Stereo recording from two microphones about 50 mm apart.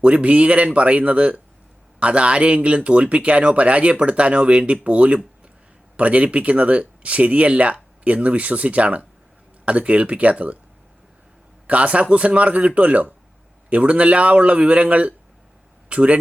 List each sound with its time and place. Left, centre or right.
0.0 s speech: right
11.7 s speech: right